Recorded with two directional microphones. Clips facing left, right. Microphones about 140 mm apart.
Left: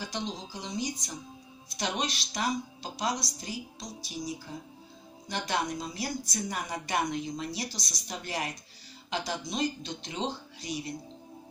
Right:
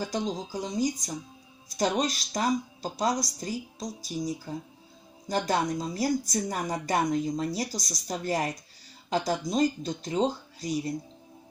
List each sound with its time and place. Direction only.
0.0 s speech: 45° right (ahead or behind)